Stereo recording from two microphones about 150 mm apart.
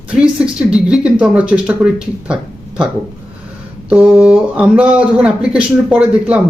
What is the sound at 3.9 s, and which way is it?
A man's voice, 5° right (ahead or behind).